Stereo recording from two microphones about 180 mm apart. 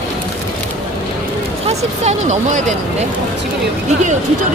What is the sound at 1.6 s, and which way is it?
Speech, 40° right (ahead or behind).